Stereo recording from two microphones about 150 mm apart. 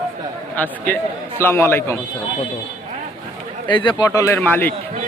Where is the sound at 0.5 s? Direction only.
10° left (ahead or behind).